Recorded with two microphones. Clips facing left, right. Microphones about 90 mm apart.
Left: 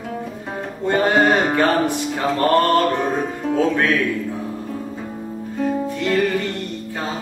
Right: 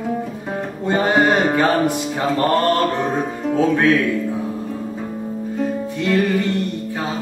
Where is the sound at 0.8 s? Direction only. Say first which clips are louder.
Even; 10° right (ahead or behind).